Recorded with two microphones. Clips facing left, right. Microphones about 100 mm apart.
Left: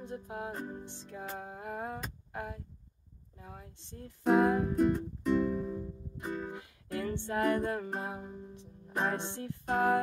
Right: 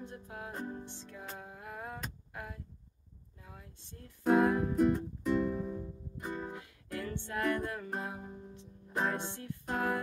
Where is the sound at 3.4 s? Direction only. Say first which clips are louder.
Left 5 dB; 25° left (ahead or behind).